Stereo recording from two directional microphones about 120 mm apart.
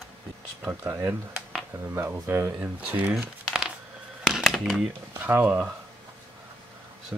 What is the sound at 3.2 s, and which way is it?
Crumpling, 5° right (ahead or behind).